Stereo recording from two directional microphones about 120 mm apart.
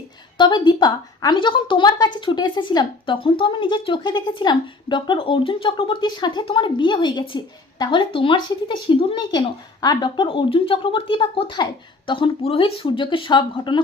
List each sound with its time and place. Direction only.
0.3 s a woman's voice: 40° left (ahead or behind)
9.8 s a woman's voice: 35° left (ahead or behind)